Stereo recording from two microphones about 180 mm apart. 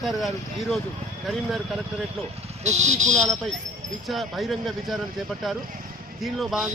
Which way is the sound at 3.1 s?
Centre (ahead or behind).